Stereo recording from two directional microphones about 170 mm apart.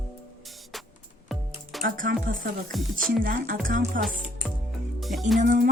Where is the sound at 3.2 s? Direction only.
55° right (ahead or behind).